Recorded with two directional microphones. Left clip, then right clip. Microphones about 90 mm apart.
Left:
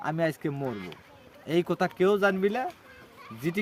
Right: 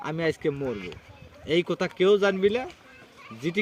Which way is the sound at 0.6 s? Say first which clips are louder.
Right 3 dB; 20° left (ahead or behind).